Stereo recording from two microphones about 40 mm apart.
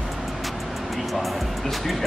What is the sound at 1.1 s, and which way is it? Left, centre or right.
Music, centre.